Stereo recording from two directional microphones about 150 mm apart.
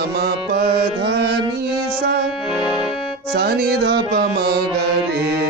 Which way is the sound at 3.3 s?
90° right.